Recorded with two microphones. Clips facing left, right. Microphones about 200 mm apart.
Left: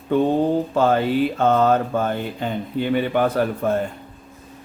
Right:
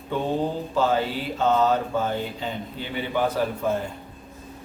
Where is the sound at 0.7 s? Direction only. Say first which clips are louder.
Left 5 dB; 55° left (ahead or behind).